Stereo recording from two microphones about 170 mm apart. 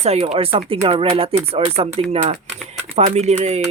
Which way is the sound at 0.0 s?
40° right (ahead or behind).